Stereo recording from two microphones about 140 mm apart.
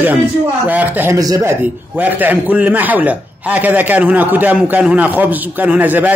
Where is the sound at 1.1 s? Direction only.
25° right (ahead or behind).